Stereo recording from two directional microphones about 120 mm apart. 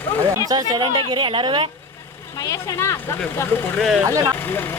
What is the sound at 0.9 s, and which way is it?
Speech, 45° right (ahead or behind).